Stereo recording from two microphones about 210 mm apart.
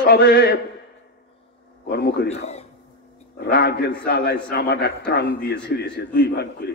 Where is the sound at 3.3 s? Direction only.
50° left (ahead or behind).